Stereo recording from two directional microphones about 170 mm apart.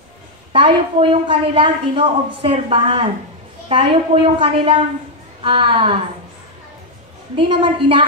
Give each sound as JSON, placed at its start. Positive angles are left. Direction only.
{"t": 0.5, "sound": "a woman's voice", "side_deg": -35}
{"t": 7.3, "sound": "a woman's voice", "side_deg": -30}